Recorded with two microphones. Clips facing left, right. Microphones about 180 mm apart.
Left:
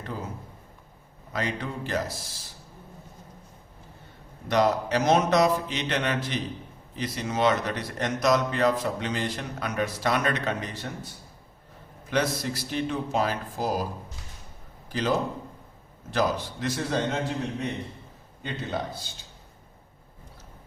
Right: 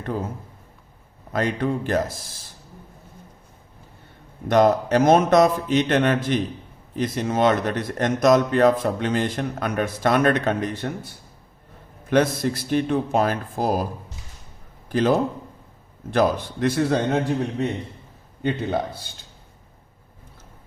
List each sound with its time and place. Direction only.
0.0 s a man's voice: 50° right (ahead or behind)
1.3 s speech: 50° right (ahead or behind)
4.4 s speech: 50° right (ahead or behind)
14.8 s a man's voice: 50° right (ahead or behind)
18.4 s a man's voice: 60° right (ahead or behind)